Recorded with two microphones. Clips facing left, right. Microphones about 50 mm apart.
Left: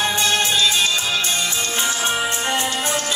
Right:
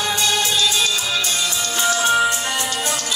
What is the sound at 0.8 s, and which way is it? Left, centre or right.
Music, left.